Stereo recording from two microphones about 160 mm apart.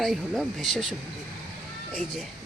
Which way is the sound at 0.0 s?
Centre (ahead or behind).